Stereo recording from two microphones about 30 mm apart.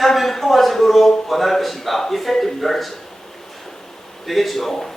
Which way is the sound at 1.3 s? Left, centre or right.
Centre.